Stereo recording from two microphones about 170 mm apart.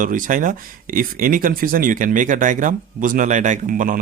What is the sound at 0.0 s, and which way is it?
Speech, 50° right (ahead or behind).